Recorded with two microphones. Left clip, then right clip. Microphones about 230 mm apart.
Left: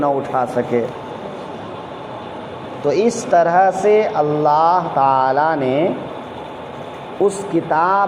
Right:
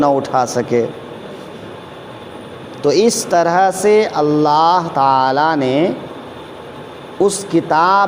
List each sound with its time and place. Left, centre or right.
0.2 s speech: right
2.8 s speech: right
7.2 s a man's voice: right